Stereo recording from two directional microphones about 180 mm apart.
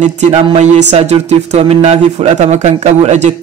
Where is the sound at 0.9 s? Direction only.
35° right (ahead or behind).